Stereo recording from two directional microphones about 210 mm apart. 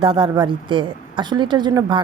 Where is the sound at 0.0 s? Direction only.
25° right (ahead or behind).